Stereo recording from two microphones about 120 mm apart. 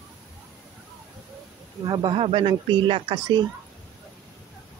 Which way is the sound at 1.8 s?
40° right (ahead or behind).